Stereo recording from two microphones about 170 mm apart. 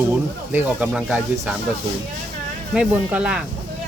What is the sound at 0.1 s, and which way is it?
Speech, 10° right (ahead or behind).